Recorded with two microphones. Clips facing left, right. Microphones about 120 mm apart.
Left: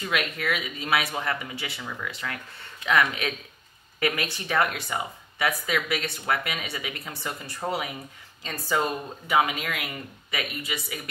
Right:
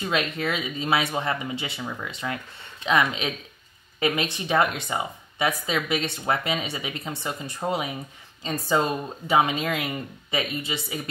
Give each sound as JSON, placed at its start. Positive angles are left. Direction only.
{"t": 0.0, "sound": "speech", "side_deg": -25}